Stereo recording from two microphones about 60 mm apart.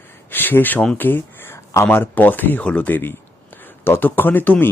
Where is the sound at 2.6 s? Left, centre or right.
Centre.